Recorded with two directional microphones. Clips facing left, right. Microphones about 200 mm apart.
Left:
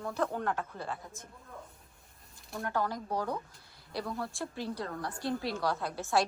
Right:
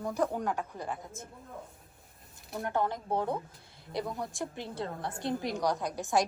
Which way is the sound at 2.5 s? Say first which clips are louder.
Right 2 dB; 20° right (ahead or behind).